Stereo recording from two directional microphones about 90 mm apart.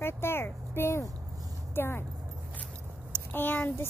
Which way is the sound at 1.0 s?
40° right (ahead or behind).